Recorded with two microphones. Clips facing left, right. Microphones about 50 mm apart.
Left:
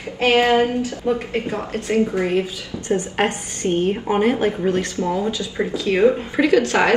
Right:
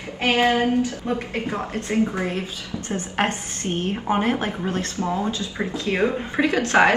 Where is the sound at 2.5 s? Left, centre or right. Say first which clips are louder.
Left 6 dB; right.